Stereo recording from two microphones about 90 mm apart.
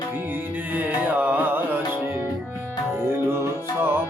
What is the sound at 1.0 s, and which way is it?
Carnatic music, 15° right (ahead or behind).